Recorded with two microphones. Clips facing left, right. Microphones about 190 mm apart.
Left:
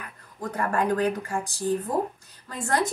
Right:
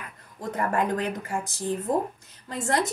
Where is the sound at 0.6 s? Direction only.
20° right (ahead or behind).